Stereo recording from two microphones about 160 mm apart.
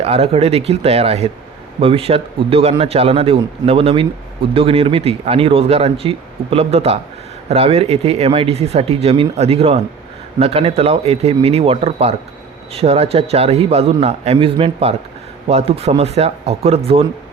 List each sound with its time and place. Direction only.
0.0 s speech: 40° right (ahead or behind)